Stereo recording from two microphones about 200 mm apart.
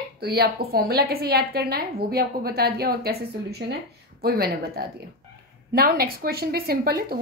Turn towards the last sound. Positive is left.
turn(degrees=-50)  # may be behind; listen again after turning